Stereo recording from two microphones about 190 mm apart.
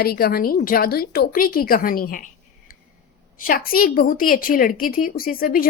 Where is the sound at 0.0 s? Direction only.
55° left (ahead or behind).